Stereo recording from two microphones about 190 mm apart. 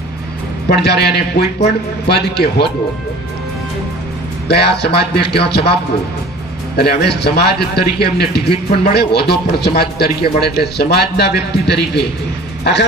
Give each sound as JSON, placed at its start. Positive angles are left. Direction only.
{"t": 0.7, "sound": "a man's voice", "side_deg": 60}
{"t": 4.5, "sound": "a man's voice", "side_deg": 60}
{"t": 6.8, "sound": "a man's voice", "side_deg": 60}